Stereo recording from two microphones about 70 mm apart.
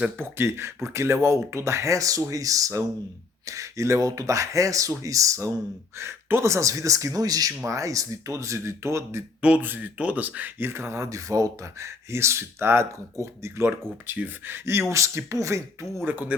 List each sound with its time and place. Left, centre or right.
0.2 s speech: right
6.0 s speech: right
7.6 s speech: right
9.4 s speech: right
14.1 s speech: right
16.0 s speech: right